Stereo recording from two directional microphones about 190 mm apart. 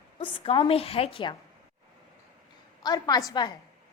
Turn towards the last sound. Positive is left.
turn(degrees=20)  # may be behind; listen again after turning